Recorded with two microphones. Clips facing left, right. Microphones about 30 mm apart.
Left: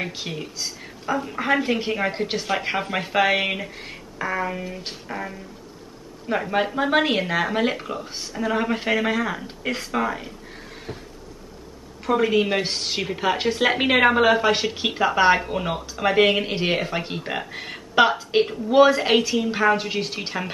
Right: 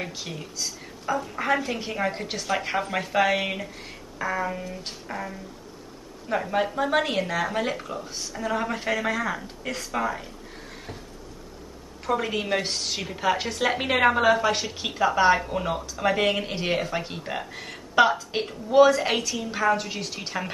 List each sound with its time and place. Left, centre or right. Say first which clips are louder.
0.0 s a woman's voice: left 4 dB; left
5.1 s a sound: left 2 dB; centre
6.2 s a woman's voice: left 2 dB; left
12.1 s a woman's voice: left 5 dB; centre